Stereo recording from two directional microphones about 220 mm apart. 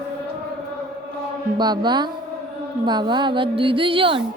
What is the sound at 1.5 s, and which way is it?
A woman's voice, 20° right (ahead or behind).